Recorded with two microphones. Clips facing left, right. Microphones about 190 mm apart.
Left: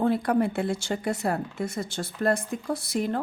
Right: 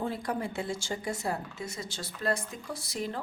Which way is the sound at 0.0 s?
65° left (ahead or behind).